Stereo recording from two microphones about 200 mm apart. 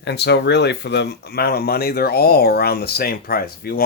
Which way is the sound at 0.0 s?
55° left (ahead or behind).